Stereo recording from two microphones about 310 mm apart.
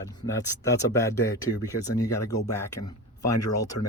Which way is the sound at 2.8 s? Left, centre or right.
Left.